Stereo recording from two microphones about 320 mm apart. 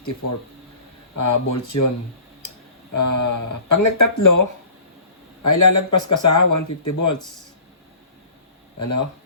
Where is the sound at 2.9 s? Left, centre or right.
Left.